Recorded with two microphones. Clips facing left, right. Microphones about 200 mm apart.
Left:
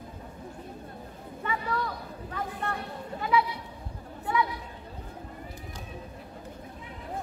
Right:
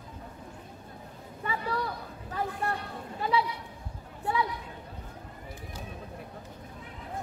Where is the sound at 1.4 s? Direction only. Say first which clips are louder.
Left 1 dB; 35° right (ahead or behind).